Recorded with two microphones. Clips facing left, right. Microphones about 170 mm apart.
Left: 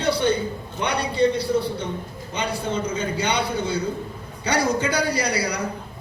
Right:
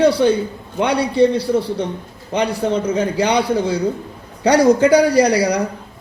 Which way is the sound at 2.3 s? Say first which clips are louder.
Right 8 dB; 70° right (ahead or behind).